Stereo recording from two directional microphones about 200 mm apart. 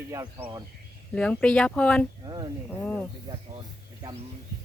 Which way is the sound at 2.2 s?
20° right (ahead or behind).